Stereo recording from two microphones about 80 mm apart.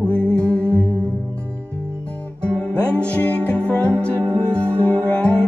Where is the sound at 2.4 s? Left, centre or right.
Centre.